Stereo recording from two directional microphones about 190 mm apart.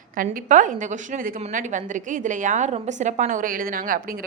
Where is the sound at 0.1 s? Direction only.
45° right (ahead or behind).